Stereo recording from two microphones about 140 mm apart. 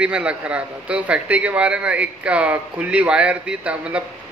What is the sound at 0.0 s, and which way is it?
A man's voice, 10° right (ahead or behind).